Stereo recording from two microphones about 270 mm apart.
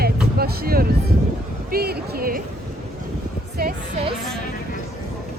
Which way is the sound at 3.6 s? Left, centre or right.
Right.